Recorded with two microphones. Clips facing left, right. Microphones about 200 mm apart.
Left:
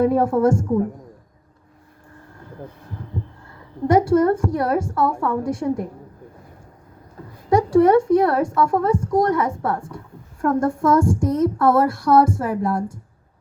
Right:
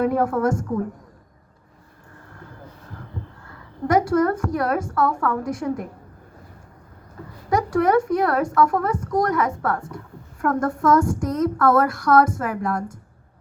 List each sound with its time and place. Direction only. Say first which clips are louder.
0.0 s a woman's voice: left 3 dB; 30° left (ahead or behind)
3.8 s a woman's voice: left 3 dB; 30° left (ahead or behind)
7.5 s a woman's voice: left 5 dB; 30° left (ahead or behind)
10.8 s a woman's voice: left 1 dB; 30° left (ahead or behind)